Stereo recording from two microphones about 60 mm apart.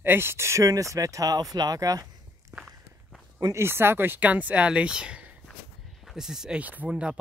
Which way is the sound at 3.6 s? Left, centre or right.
Right.